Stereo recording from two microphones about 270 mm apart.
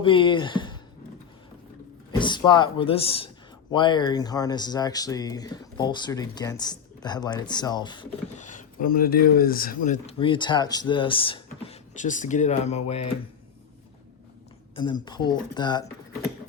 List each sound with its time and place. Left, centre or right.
0.0 s speech: centre
2.1 s speech: centre
15.0 s speech: centre